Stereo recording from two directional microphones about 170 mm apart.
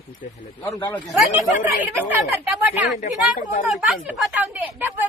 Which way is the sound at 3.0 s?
55° left (ahead or behind).